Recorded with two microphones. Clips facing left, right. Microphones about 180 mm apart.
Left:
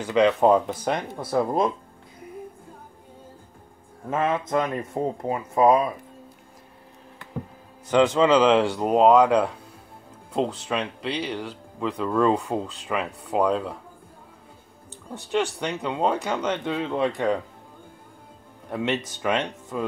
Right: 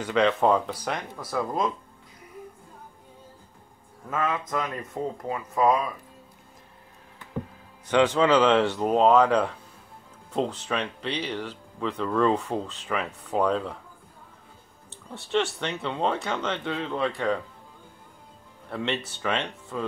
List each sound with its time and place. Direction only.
0.0 s speech: 10° left (ahead or behind)
0.5 s speech: 20° left (ahead or behind)
4.1 s speech: 25° left (ahead or behind)
7.9 s speech: 5° left (ahead or behind)
10.7 s speech: 5° left (ahead or behind)
15.6 s speech: 10° left (ahead or behind)
18.7 s speech: 15° left (ahead or behind)